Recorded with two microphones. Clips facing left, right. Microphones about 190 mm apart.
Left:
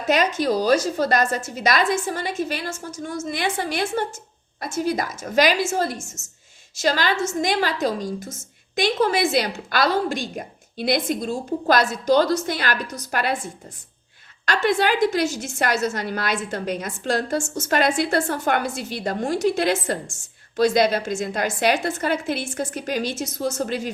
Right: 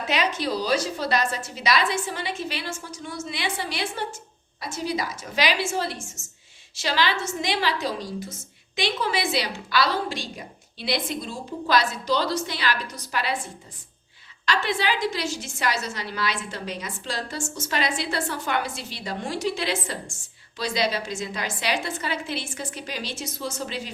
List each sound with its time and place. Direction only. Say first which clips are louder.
0.1 s a woman's voice: left 6 dB; 45° left (ahead or behind)
14.4 s a woman's voice: left 5 dB; 45° left (ahead or behind)